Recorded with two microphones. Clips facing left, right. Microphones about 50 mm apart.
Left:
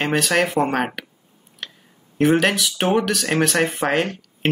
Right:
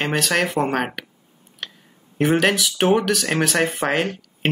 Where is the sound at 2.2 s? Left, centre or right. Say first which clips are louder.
Left 1 dB; centre.